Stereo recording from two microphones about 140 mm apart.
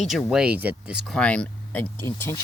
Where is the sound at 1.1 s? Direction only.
10° left (ahead or behind).